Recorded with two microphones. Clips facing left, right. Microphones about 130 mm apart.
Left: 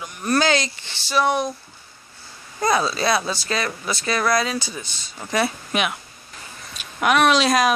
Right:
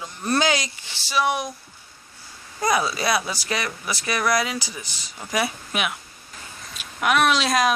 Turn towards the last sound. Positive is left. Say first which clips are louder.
# left 3 dB
turn(degrees=0)  # may be behind; listen again after turning